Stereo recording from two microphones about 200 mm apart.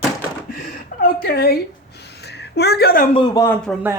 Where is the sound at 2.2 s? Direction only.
55° left (ahead or behind).